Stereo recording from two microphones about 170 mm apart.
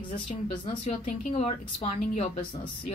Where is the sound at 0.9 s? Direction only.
40° left (ahead or behind).